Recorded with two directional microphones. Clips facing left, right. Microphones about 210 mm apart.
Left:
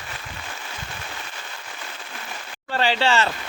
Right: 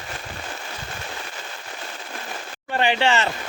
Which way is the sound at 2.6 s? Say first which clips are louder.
Right 1 dB; 20° right (ahead or behind).